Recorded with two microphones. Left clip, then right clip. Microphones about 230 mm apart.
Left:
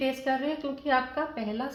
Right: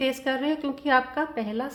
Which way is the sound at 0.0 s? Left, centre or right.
Right.